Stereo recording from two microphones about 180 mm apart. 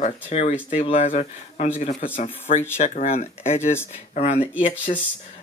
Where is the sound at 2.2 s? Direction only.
45° left (ahead or behind).